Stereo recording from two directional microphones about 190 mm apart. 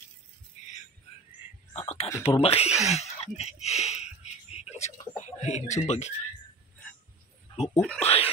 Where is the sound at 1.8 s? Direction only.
35° left (ahead or behind).